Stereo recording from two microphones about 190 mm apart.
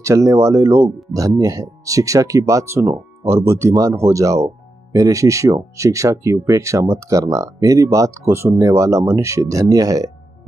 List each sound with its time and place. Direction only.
0.0 s speech: 15° right (ahead or behind)